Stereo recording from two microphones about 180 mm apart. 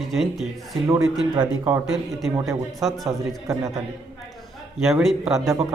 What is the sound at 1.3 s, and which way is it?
Speech, 20° right (ahead or behind).